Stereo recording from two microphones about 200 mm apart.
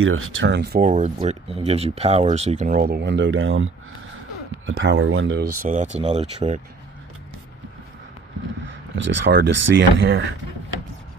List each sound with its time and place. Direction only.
0.0 s speech: 90° right; by 0.8 s 55° right (ahead or behind)
0.8 s speech: 35° right (ahead or behind); by 5.7 s 55° right (ahead or behind)
5.7 s speech: 35° right (ahead or behind)
8.9 s speech: 65° right (ahead or behind)